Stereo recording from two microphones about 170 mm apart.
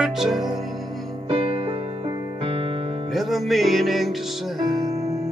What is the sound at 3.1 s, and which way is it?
Music, centre (ahead or behind).